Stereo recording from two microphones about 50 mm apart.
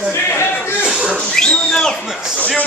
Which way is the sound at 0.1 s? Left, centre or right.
Left.